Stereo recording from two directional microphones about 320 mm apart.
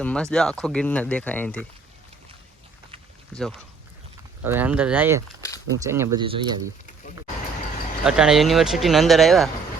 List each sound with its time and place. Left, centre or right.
0.0 s speech: centre
3.3 s speech: centre
5.4 s a sound: centre
5.8 s speech: centre
8.0 s speech: centre